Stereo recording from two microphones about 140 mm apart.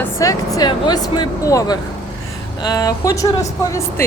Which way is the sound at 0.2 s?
25° left (ahead or behind).